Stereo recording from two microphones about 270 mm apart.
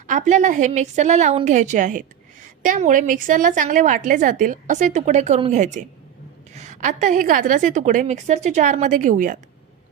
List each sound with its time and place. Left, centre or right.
0.1 s a woman's voice: right